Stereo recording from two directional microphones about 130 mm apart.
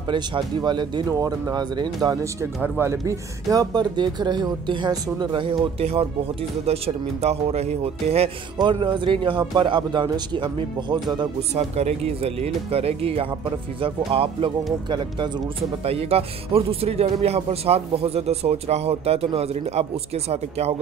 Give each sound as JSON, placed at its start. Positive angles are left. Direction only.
{"t": 0.1, "sound": "speech", "side_deg": -35}
{"t": 8.5, "sound": "speech", "side_deg": -35}
{"t": 11.5, "sound": "speech", "side_deg": -55}
{"t": 15.8, "sound": "speech", "side_deg": -50}